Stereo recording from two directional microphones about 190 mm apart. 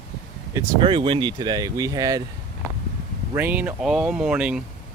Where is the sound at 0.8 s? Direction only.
25° right (ahead or behind).